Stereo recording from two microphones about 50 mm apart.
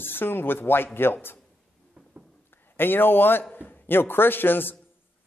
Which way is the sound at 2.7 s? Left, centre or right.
Left.